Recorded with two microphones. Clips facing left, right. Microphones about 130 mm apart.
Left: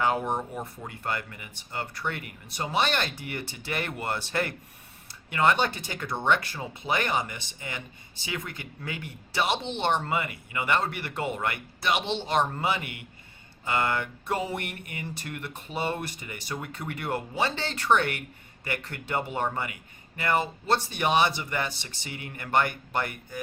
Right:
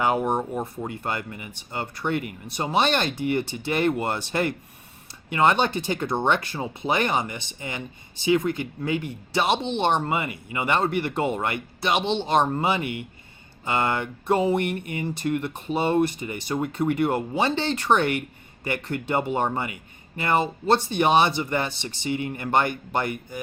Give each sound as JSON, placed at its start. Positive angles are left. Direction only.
{"t": 0.0, "sound": "speech", "side_deg": -15}